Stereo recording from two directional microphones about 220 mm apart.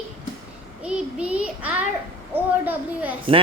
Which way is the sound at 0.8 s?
5° right (ahead or behind).